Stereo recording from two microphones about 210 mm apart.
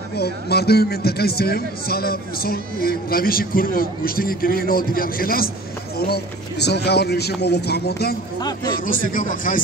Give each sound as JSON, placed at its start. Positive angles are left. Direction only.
{"t": 0.1, "sound": "a man's voice", "side_deg": 50}
{"t": 8.4, "sound": "a man's voice", "side_deg": 20}
{"t": 8.7, "sound": "a man's voice", "side_deg": 40}